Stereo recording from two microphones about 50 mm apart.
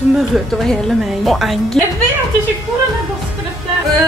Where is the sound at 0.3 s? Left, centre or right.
Centre.